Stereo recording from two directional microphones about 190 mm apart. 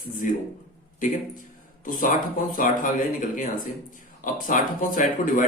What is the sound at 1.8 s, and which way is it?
A man's voice, 45° left (ahead or behind).